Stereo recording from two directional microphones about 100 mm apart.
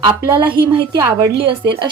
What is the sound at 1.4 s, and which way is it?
Speech, 60° right (ahead or behind).